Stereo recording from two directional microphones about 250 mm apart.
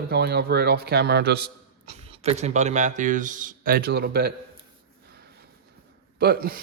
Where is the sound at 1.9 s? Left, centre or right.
Right.